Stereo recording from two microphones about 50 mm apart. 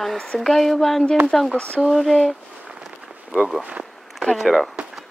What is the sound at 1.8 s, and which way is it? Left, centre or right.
Speech, centre.